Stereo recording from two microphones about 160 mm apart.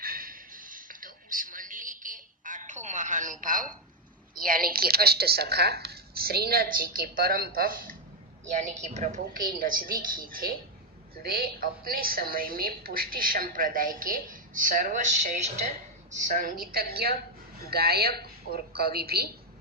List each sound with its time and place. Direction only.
0.0 s a sound: 65° right (ahead or behind); by 3.3 s 50° right (ahead or behind)
3.4 s a woman's voice: 55° right (ahead or behind)
8.4 s a woman's voice: 45° right (ahead or behind); by 19.3 s 75° right (ahead or behind)